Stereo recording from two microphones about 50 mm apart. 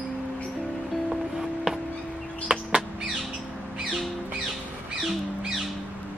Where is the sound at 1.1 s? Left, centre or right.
Centre.